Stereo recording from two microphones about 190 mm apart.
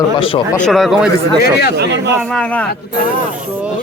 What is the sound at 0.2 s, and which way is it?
Speech, 30° left (ahead or behind).